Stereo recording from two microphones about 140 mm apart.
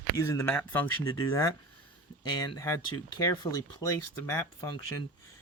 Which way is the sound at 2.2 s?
30° left (ahead or behind).